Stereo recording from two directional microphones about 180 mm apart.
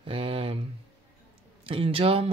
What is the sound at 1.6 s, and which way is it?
Speech, 30° right (ahead or behind).